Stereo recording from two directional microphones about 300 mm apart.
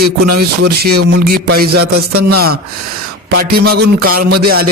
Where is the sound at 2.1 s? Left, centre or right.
Right.